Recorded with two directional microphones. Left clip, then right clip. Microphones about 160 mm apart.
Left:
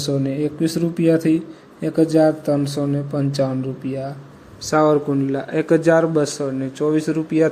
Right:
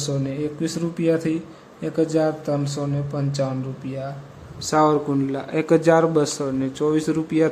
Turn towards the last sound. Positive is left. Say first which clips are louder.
# left 2 dB
turn(degrees=5)  # may be behind; listen again after turning